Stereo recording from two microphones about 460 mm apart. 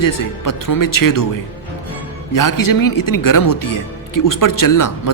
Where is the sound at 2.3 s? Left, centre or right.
Left.